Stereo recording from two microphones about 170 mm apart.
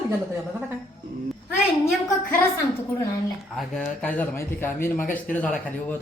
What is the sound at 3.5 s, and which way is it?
Speech, 5° left (ahead or behind).